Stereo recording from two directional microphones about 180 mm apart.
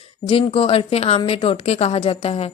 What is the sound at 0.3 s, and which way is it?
A woman's voice, 30° left (ahead or behind).